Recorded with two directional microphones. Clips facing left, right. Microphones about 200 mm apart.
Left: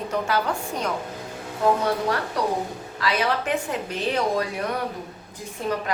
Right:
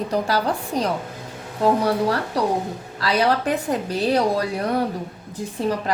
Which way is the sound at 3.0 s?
35° right (ahead or behind).